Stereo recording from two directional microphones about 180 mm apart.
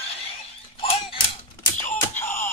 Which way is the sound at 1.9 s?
10° left (ahead or behind).